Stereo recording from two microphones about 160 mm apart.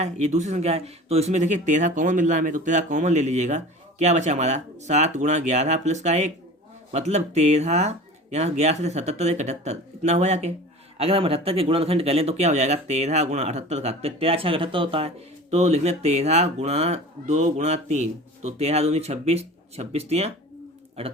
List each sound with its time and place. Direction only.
0.0 s speech: 45° right (ahead or behind)